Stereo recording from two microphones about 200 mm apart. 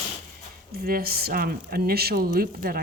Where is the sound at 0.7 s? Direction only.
50° right (ahead or behind).